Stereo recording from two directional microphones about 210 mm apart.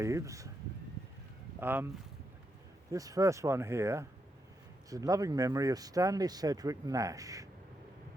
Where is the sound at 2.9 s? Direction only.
15° right (ahead or behind).